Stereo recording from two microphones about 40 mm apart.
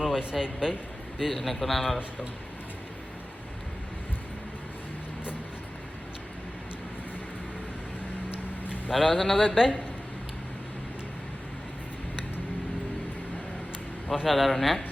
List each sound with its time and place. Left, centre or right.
0.0 s a sound: centre
0.3 s speech: centre
1.2 s speech: centre
8.9 s speech: centre
9.4 s speech: centre
14.3 s speech: centre